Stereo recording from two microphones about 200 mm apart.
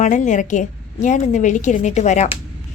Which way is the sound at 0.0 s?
40° left (ahead or behind).